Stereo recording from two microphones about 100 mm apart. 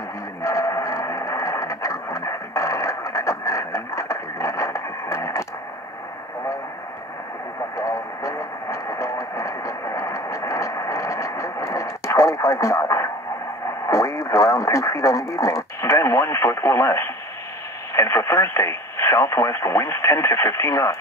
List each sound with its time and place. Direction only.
0.4 s a sound: 30° left (ahead or behind)
7.7 s vehicle: 30° left (ahead or behind)
13.8 s radio: 30° left (ahead or behind)
17.9 s speech: 25° left (ahead or behind)